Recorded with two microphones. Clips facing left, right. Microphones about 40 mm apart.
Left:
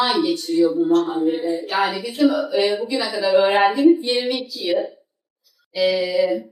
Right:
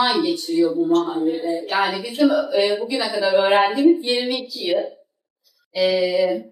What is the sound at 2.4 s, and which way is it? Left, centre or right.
Speech, centre.